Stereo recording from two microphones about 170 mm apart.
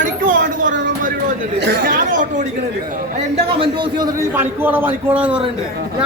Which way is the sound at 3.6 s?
25° right (ahead or behind).